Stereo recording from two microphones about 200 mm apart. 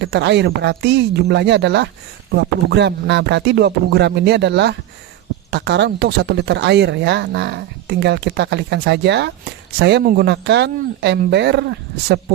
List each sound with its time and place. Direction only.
0.0 s speech: 60° right (ahead or behind)